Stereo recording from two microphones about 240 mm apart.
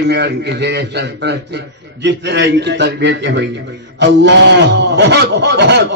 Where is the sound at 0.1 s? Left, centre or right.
Right.